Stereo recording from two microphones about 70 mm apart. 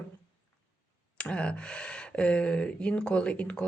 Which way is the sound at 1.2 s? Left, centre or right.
Centre.